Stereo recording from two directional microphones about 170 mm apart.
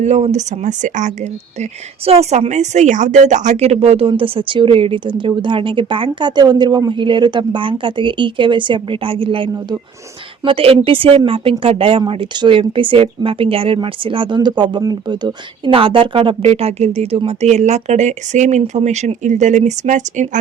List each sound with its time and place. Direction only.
0.0 s a woman's voice: 40° right (ahead or behind)